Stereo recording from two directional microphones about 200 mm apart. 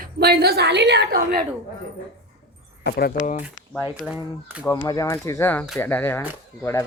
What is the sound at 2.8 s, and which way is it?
Speech, 50° left (ahead or behind).